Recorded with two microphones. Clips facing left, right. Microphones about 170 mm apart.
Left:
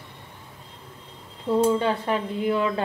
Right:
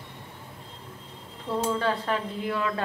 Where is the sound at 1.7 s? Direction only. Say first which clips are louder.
Left 4 dB; 20° left (ahead or behind).